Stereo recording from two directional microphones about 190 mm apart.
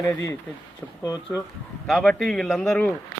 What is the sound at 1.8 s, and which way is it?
Speech, centre (ahead or behind).